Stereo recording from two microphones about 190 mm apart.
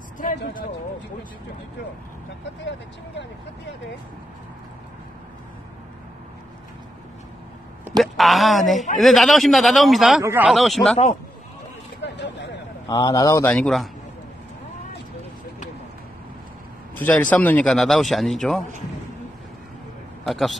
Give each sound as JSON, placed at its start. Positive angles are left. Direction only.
{"t": 8.0, "sound": "speech", "side_deg": 0}
{"t": 10.2, "sound": "speech", "side_deg": -10}
{"t": 10.5, "sound": "speech", "side_deg": 0}
{"t": 12.0, "sound": "a sound", "side_deg": 65}
{"t": 12.8, "sound": "a man's voice", "side_deg": 20}
{"t": 13.5, "sound": "speech", "side_deg": 5}
{"t": 16.9, "sound": "speech", "side_deg": 10}
{"t": 20.2, "sound": "speech", "side_deg": 0}